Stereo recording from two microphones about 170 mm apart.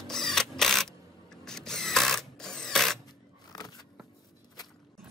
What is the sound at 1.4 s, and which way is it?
Drill, 5° left (ahead or behind).